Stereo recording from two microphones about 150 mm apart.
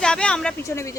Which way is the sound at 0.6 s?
20° left (ahead or behind).